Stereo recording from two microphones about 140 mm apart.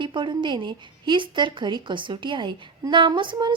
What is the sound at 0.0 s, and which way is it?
A woman's voice, 35° right (ahead or behind).